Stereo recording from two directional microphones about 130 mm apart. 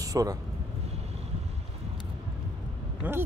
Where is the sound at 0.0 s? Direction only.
25° right (ahead or behind).